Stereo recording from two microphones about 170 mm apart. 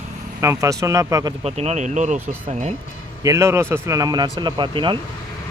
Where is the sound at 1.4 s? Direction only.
40° right (ahead or behind).